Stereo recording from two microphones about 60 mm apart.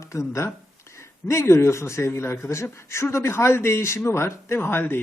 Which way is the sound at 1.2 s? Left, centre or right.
Left.